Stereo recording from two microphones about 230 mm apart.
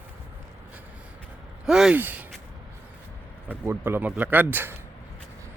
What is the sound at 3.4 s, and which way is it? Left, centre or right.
Speech, centre.